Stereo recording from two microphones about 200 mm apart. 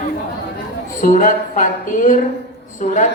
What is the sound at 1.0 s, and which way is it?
Speech, 40° left (ahead or behind).